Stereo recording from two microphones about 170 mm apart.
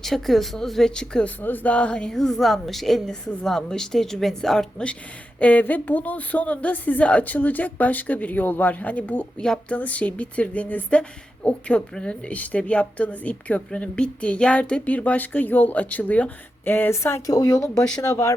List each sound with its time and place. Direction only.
0.0 s a woman's voice: centre (ahead or behind); by 18.3 s 20° left (ahead or behind)